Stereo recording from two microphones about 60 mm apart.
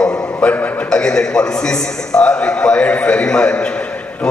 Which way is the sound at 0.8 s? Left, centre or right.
Centre.